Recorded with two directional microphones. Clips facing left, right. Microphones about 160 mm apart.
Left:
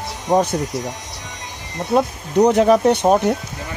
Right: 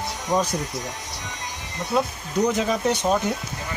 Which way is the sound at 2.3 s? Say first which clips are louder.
Left 9 dB; 65° left (ahead or behind).